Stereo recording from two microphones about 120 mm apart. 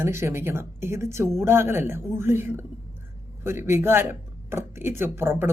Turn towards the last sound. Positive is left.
turn(degrees=-20)  # may be behind; listen again after turning